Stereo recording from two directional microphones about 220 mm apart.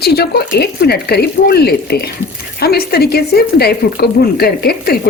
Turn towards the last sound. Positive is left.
turn(degrees=45)  # may be behind; listen again after turning